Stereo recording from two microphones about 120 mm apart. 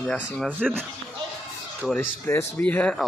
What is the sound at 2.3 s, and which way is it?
Speech, 20° left (ahead or behind).